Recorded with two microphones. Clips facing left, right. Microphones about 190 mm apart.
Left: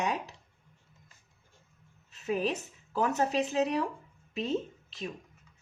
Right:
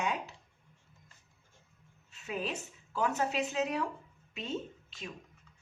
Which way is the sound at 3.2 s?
35° left (ahead or behind).